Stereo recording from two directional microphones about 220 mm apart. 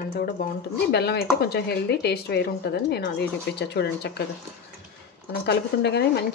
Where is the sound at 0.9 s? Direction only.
45° left (ahead or behind).